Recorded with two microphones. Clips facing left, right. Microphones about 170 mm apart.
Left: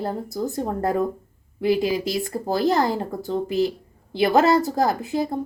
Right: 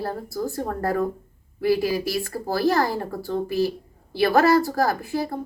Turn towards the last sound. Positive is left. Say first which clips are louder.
# left 2 dB
turn(degrees=20)  # may be behind; listen again after turning